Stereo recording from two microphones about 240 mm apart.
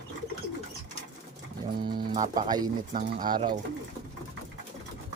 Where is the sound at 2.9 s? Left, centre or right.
Right.